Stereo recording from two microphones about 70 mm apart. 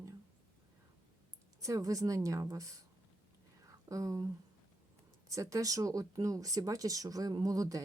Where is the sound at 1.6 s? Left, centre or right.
Right.